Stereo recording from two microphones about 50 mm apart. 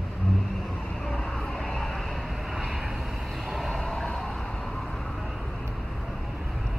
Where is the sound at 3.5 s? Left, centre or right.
Centre.